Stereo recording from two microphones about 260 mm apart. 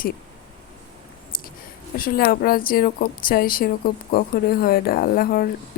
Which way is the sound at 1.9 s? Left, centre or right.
Left.